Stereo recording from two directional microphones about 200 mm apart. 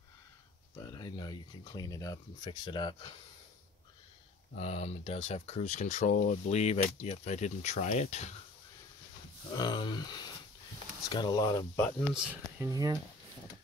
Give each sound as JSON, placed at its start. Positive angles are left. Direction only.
{"t": 0.7, "sound": "speech", "side_deg": 20}
{"t": 4.6, "sound": "speech", "side_deg": 30}
{"t": 9.5, "sound": "speech", "side_deg": 20}
{"t": 11.8, "sound": "speech", "side_deg": 0}